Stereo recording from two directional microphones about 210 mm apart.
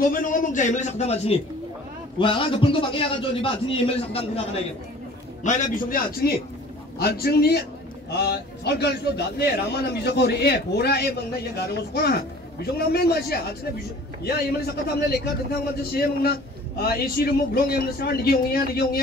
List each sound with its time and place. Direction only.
0.1 s a man's voice: 40° left (ahead or behind)
5.4 s a man's voice: 40° left (ahead or behind)